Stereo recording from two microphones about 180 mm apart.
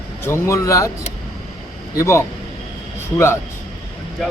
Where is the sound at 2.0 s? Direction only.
15° left (ahead or behind).